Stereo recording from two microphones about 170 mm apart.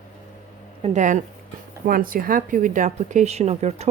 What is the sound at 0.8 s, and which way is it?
A woman's voice, 45° right (ahead or behind).